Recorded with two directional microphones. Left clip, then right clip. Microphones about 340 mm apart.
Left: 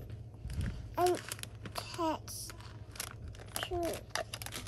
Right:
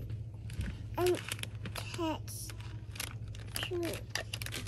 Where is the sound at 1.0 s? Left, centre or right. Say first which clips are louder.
Left 1 dB; centre.